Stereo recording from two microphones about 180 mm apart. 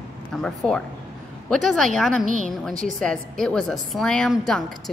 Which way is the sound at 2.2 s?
45° right (ahead or behind).